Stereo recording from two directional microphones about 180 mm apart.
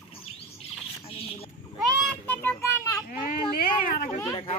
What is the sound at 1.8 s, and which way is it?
Children playing, centre (ahead or behind).